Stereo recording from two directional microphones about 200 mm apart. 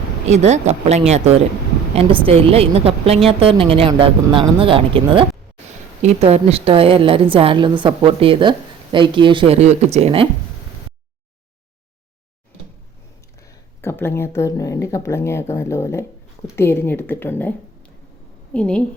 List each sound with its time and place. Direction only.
0.3 s a woman's voice: 35° right (ahead or behind)
13.8 s speech: 10° left (ahead or behind)
18.5 s a woman's voice: 5° left (ahead or behind)